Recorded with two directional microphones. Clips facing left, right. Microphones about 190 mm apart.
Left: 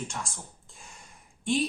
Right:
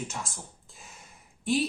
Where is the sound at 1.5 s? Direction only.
5° right (ahead or behind).